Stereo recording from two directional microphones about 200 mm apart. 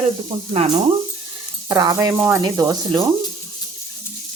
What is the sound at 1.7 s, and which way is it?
Speech, 20° right (ahead or behind).